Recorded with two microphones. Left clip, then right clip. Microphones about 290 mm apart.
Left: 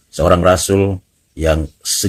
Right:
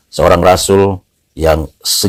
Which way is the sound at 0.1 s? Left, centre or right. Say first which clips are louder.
Right 4 dB; centre.